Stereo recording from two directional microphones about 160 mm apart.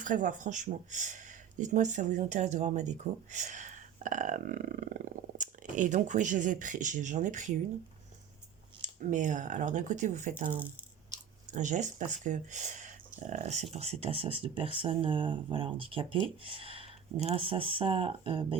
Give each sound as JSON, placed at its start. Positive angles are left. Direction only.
{"t": 0.0, "sound": "speech", "side_deg": -55}
{"t": 8.8, "sound": "speech", "side_deg": -55}